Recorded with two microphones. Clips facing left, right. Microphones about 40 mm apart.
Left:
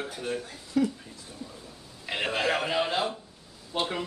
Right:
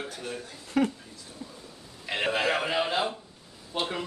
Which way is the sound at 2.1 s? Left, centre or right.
Centre.